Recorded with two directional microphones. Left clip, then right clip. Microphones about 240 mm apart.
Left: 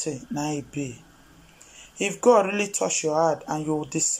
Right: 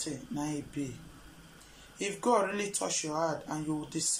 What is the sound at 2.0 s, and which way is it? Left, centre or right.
Speech, centre.